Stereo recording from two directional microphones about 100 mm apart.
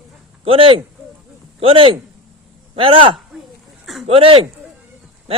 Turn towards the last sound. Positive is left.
turn(degrees=-75)  # may be behind; listen again after turning